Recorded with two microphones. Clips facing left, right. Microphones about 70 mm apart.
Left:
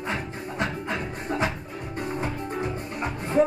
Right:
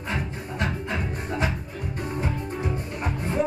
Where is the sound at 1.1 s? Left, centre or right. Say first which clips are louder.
Left 1 dB; left.